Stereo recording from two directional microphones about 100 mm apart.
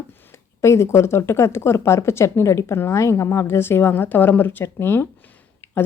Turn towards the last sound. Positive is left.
turn(degrees=20)  # may be behind; listen again after turning